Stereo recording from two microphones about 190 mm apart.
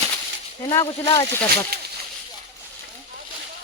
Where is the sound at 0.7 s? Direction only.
20° left (ahead or behind).